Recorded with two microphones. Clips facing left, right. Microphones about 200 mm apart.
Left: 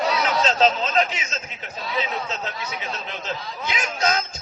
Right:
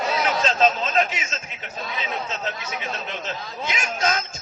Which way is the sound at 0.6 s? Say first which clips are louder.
Even; 45° right (ahead or behind).